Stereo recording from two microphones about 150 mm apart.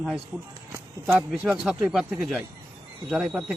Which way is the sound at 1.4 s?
10° right (ahead or behind).